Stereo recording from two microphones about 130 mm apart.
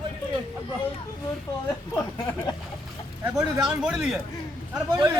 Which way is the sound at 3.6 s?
5° right (ahead or behind).